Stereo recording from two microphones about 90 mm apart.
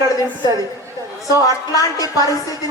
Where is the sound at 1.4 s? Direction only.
40° left (ahead or behind).